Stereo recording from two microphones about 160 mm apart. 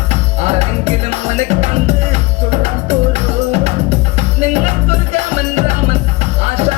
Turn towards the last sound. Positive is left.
turn(degrees=-40)  # may be behind; listen again after turning